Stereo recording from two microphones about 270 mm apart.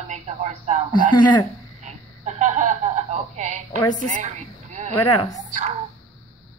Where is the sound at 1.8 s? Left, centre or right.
Right.